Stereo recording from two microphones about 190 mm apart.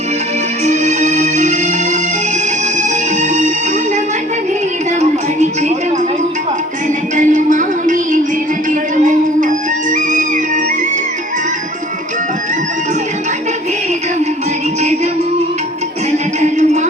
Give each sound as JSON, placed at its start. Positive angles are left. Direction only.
{"t": 0.6, "sound": "music", "side_deg": -35}
{"t": 3.2, "sound": "music", "side_deg": -40}
{"t": 4.9, "sound": "music", "side_deg": -35}
{"t": 7.2, "sound": "music", "side_deg": -40}
{"t": 9.9, "sound": "music", "side_deg": -40}
{"t": 16.4, "sound": "music", "side_deg": -40}